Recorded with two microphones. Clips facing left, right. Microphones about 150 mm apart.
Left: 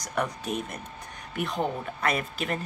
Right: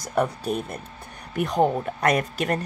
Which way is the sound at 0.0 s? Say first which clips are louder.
Right 6 dB; 30° right (ahead or behind).